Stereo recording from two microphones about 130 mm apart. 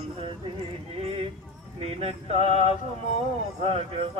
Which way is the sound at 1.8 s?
50° right (ahead or behind).